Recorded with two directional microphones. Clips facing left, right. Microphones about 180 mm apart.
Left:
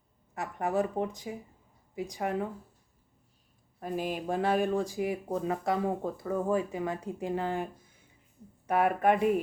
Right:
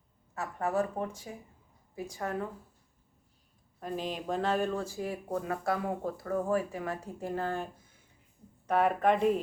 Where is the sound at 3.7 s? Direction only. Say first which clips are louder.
Left 2 dB; 10° left (ahead or behind).